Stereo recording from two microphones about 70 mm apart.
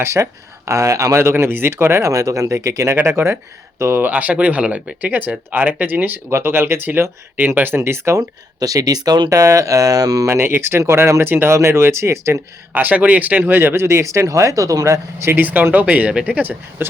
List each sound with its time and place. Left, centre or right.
0.0 s speech: right
2.9 s speech: right
4.0 s speech: right
7.8 s speech: right
8.2 s speech: right
9.3 s speech: right
10.2 s speech: right
12.7 s speech: right
13.4 s speech: right
15.4 s speech: right